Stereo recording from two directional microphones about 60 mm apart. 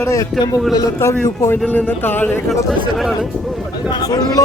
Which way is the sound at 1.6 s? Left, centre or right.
Left.